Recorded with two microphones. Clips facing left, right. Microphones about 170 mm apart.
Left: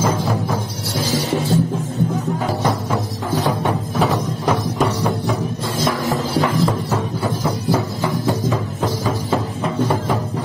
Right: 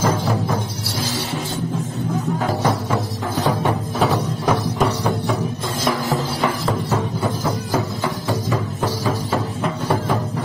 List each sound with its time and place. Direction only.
0.3 s music: centre (ahead or behind)
2.6 s music: centre (ahead or behind)
4.7 s music: centre (ahead or behind)
8.0 s music: 15° left (ahead or behind)